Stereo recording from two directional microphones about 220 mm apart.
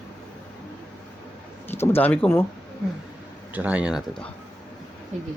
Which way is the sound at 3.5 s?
5° right (ahead or behind).